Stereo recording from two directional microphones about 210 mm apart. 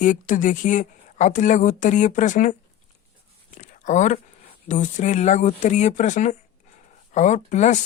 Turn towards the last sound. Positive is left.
turn(degrees=35)  # may be behind; listen again after turning